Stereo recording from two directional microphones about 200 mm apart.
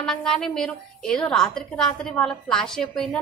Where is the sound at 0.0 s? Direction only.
5° left (ahead or behind).